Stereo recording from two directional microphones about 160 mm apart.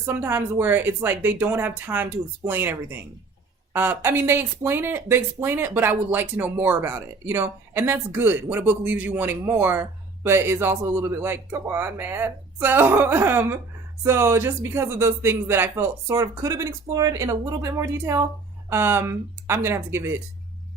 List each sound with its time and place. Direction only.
0.0 s speech: 15° right (ahead or behind)